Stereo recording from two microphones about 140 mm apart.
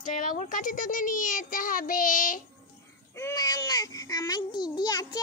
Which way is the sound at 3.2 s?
25° left (ahead or behind).